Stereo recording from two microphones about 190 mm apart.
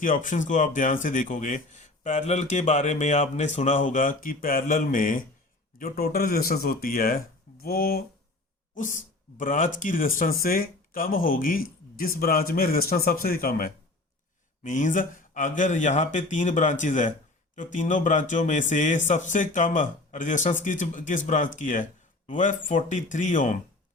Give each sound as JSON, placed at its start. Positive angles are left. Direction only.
{"t": 0.0, "sound": "a man's voice", "side_deg": 45}